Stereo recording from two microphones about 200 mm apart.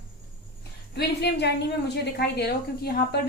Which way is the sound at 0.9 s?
55° left (ahead or behind).